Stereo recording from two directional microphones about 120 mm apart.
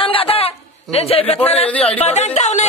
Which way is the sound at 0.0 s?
50° left (ahead or behind).